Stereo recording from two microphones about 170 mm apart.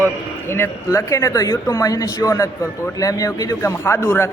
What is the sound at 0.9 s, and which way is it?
Speech, 15° left (ahead or behind).